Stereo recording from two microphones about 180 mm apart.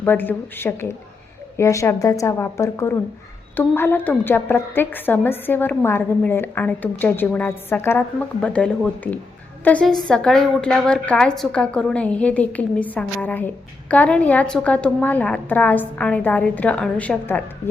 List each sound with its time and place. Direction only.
0.0 s a woman's voice: 10° left (ahead or behind)